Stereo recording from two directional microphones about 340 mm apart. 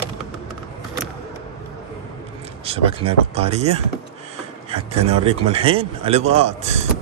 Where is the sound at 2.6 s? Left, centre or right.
Centre.